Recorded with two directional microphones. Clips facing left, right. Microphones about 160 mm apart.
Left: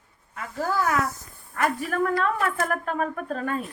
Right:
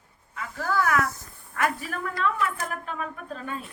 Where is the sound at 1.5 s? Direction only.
50° left (ahead or behind).